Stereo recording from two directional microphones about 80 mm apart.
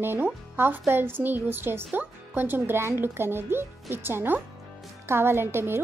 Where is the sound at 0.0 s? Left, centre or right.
Right.